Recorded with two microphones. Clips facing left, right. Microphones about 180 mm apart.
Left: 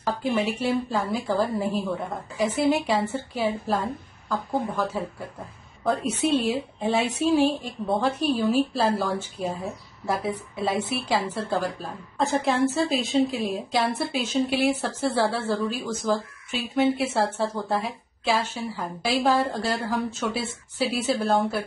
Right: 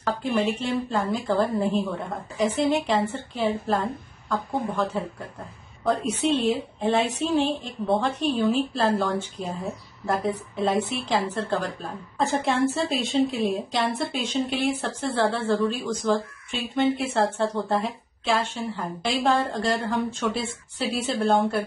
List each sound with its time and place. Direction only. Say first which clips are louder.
0.0 s a woman's voice: right 1 dB; 5° left (ahead or behind)
6.5 s a woman's voice: right 1 dB; 5° left (ahead or behind)